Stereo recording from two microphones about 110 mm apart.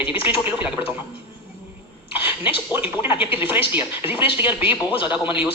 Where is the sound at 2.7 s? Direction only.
20° right (ahead or behind).